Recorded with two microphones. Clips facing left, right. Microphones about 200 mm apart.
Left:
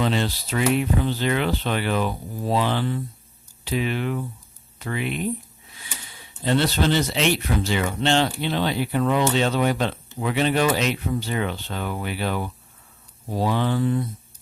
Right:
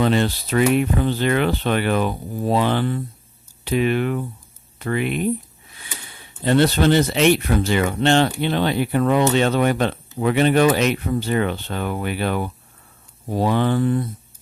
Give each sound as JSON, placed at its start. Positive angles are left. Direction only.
{"t": 0.0, "sound": "speech", "side_deg": -55}
{"t": 6.4, "sound": "speech", "side_deg": -55}